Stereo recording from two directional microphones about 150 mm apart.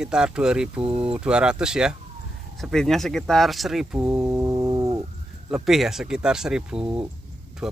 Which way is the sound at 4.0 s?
20° right (ahead or behind).